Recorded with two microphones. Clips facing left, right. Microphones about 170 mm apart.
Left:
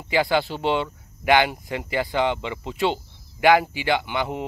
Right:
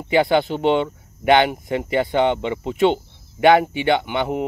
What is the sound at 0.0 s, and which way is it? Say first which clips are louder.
Speech: right 5 dB; 25° right (ahead or behind).